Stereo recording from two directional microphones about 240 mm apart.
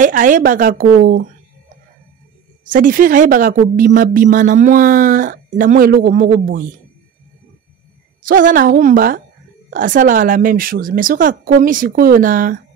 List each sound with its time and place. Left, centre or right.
0.0 s speech: right
2.6 s speech: right
8.2 s speech: right